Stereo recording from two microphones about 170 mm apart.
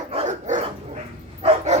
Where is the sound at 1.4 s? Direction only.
40° right (ahead or behind).